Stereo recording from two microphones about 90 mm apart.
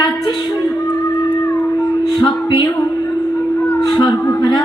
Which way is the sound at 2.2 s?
55° left (ahead or behind).